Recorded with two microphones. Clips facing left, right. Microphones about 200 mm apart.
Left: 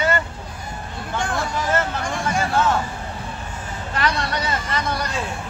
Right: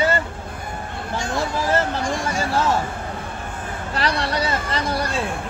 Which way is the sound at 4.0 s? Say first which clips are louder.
Right 1 dB; 30° right (ahead or behind).